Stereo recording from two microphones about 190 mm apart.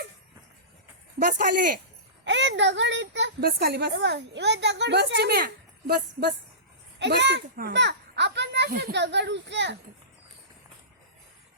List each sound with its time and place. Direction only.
1.2 s speech: 45° right (ahead or behind)
2.2 s a woman's voice: 70° right (ahead or behind)